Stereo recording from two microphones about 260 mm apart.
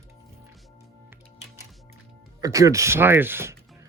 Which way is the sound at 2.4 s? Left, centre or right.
Centre.